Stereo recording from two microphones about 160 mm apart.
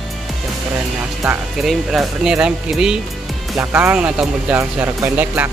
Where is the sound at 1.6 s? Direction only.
5° right (ahead or behind).